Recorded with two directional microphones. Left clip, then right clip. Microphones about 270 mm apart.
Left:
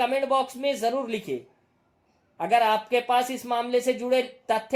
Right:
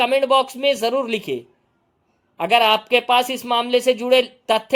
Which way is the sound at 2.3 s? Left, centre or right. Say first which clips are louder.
Right 6 dB; right.